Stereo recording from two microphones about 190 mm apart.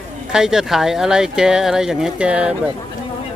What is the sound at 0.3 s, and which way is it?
Speech, 5° right (ahead or behind).